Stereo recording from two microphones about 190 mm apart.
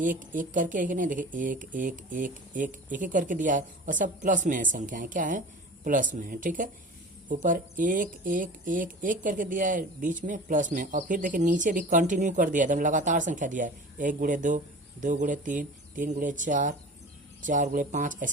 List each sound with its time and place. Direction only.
0.0 s speech: 45° right (ahead or behind)